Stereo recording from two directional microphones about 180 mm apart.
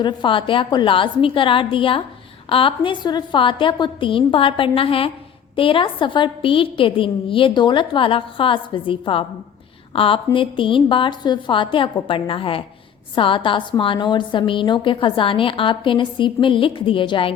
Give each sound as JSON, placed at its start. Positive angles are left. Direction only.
{"t": 0.0, "sound": "a woman's voice", "side_deg": 25}